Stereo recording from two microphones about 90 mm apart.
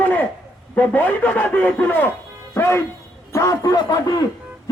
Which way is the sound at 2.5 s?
30° left (ahead or behind).